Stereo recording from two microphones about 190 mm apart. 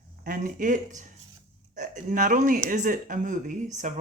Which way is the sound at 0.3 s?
40° right (ahead or behind).